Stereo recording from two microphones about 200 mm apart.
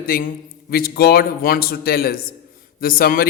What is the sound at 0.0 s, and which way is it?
Speech, 45° left (ahead or behind).